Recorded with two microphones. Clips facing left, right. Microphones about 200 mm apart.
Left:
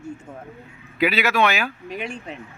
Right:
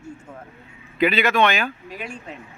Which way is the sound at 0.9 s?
5° left (ahead or behind).